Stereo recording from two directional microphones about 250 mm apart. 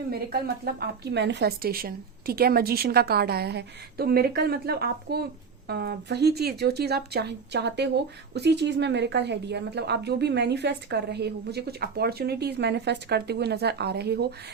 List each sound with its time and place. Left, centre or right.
0.1 s a woman's voice: right